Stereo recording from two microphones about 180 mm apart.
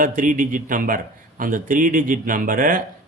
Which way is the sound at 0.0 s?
45° right (ahead or behind).